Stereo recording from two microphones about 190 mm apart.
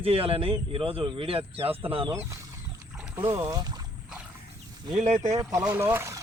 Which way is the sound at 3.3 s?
20° right (ahead or behind).